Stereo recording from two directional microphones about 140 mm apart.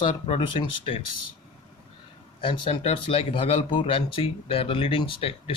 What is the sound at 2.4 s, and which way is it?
Speech, 45° left (ahead or behind).